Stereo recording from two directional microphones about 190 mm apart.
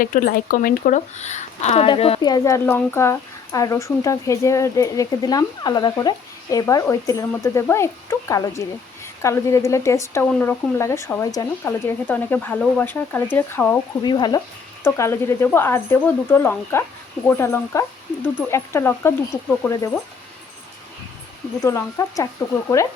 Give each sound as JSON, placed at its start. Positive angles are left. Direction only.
{"t": 0.0, "sound": "speech", "side_deg": 45}
{"t": 14.0, "sound": "speech", "side_deg": 25}
{"t": 21.6, "sound": "speech", "side_deg": 15}